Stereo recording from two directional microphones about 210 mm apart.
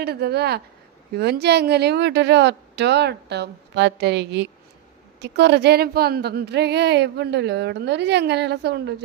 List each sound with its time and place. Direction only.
0.0 s a woman's voice: 50° right (ahead or behind)